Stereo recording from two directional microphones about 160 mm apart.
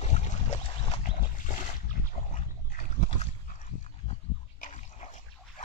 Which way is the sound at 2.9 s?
45° left (ahead or behind).